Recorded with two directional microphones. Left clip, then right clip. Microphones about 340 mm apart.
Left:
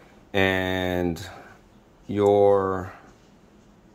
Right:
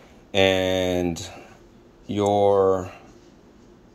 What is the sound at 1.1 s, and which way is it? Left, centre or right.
Speech, left.